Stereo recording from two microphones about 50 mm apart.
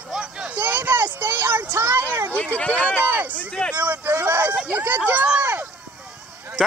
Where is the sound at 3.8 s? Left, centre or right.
Right.